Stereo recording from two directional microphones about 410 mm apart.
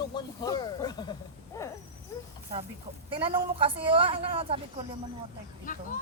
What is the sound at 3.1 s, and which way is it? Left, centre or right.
A woman's voice, centre.